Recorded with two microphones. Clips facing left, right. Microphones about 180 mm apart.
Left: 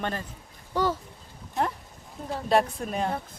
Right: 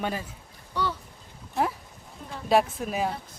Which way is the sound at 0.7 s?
45° left (ahead or behind).